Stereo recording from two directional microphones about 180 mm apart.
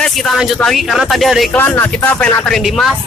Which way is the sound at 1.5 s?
15° left (ahead or behind).